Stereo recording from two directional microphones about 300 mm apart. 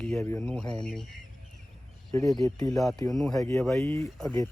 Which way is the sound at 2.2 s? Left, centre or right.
Centre.